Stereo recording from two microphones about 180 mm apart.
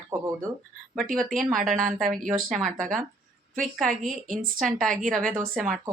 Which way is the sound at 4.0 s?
45° right (ahead or behind).